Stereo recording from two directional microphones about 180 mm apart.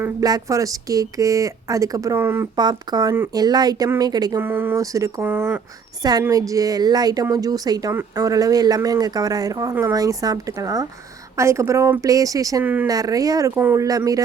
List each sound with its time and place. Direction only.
0.0 s speech: 20° right (ahead or behind)
2.6 s a woman's voice: 25° right (ahead or behind)
12.9 s a woman's voice: 20° right (ahead or behind)